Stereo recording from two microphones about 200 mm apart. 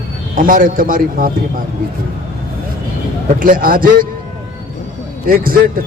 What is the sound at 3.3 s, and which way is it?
Speech, 45° right (ahead or behind).